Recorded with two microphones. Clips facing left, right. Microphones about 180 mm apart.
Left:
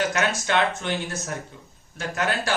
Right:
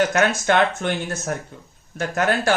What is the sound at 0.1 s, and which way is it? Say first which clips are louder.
Speech: right 5 dB; 50° right (ahead or behind).